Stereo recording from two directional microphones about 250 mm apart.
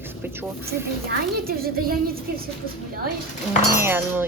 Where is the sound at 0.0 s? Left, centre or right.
Centre.